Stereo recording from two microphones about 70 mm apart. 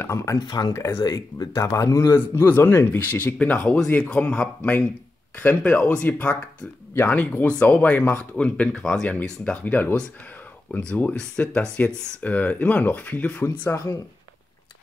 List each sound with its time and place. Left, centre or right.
0.0 s speech: left
1.0 s speech: left
3.0 s speech: left
9.7 s speech: left